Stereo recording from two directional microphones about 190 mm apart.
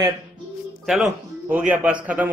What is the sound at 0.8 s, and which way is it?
A man's voice, centre (ahead or behind).